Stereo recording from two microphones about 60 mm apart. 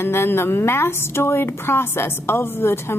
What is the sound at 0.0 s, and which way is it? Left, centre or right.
A woman's voice, left.